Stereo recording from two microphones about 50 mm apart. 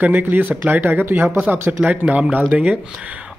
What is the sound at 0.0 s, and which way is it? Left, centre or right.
Speech, right.